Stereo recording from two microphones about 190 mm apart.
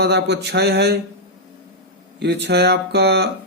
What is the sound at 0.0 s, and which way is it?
Speech, 60° right (ahead or behind).